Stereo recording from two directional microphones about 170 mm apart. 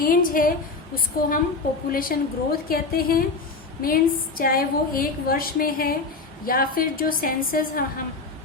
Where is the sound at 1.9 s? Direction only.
60° left (ahead or behind).